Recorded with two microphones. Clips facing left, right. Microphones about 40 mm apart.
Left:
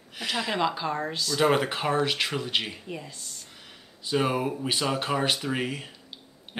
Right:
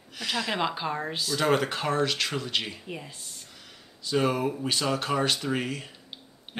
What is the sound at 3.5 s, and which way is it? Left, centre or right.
Speech, centre.